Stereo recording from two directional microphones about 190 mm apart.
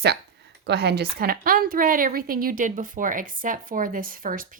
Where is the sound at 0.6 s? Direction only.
60° right (ahead or behind).